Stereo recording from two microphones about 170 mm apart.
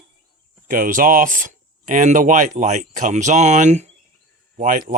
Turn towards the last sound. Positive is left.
turn(degrees=-50)  # may be behind; listen again after turning